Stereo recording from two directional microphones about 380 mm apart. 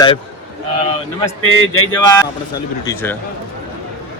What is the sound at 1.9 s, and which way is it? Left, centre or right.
Speech, centre.